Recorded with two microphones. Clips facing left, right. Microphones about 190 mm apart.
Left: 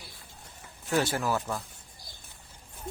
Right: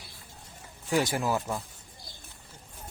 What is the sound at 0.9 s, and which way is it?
Speech, 15° right (ahead or behind).